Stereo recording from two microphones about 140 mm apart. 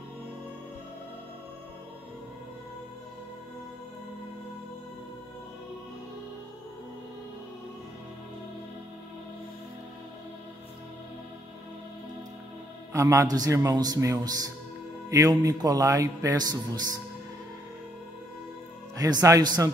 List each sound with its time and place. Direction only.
12.9 s a man's voice: 20° right (ahead or behind)
18.9 s a man's voice: 25° right (ahead or behind)